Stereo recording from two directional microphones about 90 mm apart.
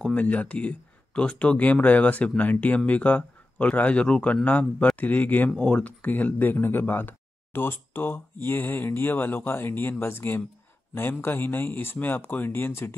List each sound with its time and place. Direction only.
0.0 s speech: 15° left (ahead or behind)